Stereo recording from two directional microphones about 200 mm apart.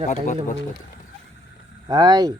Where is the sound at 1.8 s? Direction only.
20° right (ahead or behind).